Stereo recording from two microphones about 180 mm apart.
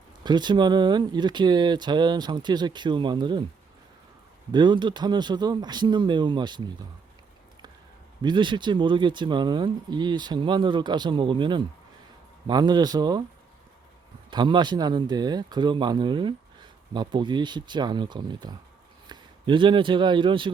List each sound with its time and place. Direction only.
0.3 s speech: 25° right (ahead or behind)
4.5 s speech: 25° right (ahead or behind)
8.2 s speech: 25° right (ahead or behind)
14.3 s a man's voice: 25° right (ahead or behind)